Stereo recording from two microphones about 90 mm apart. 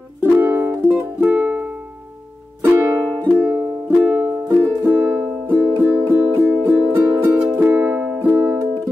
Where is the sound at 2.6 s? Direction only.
25° right (ahead or behind).